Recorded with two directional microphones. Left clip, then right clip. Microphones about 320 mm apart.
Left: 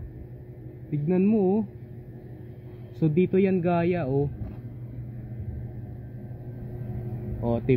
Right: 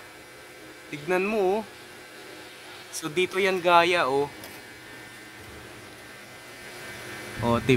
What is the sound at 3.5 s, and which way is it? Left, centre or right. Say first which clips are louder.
Speech: right 6 dB; right.